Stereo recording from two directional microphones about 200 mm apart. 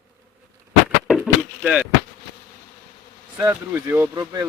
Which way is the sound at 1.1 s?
5° right (ahead or behind).